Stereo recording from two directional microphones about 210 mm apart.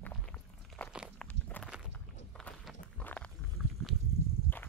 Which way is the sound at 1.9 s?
5° left (ahead or behind).